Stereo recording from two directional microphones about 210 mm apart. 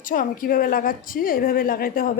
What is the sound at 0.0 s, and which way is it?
A woman's voice, 40° left (ahead or behind).